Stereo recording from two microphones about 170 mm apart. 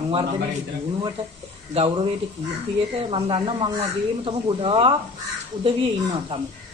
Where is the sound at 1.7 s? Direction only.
35° right (ahead or behind).